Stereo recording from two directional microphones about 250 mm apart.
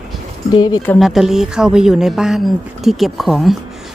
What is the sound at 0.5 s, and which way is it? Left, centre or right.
Speech, centre.